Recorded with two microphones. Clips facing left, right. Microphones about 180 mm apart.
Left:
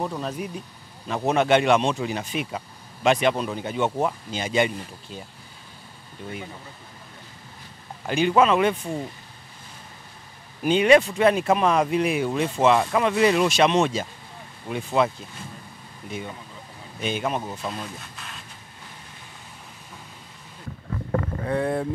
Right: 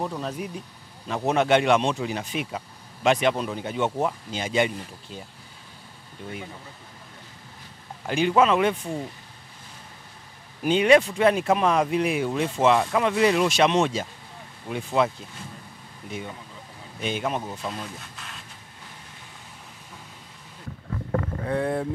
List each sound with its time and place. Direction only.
1.0 s speech: 10° left (ahead or behind)
6.2 s speech: 15° left (ahead or behind)
8.0 s speech: 10° left (ahead or behind)
10.6 s speech: 10° left (ahead or behind)
20.9 s boat: 20° left (ahead or behind)